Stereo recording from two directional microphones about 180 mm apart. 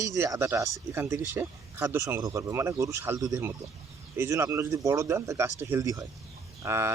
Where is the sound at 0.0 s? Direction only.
15° right (ahead or behind).